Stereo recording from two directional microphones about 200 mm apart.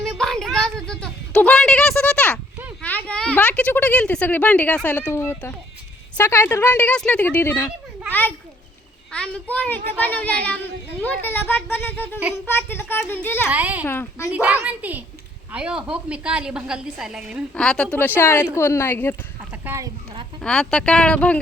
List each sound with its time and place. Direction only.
0.0 s a sound: centre (ahead or behind)
2.8 s a woman's voice: 10° left (ahead or behind)
9.1 s a woman's voice: 5° left (ahead or behind)
13.5 s a child's voice: 10° right (ahead or behind)
13.8 s a woman's voice: 10° left (ahead or behind)
14.3 s a child's voice: 5° right (ahead or behind); by 19.1 s 10° left (ahead or behind)
19.4 s a sound: 10° right (ahead or behind)
20.4 s a woman's voice: 5° left (ahead or behind)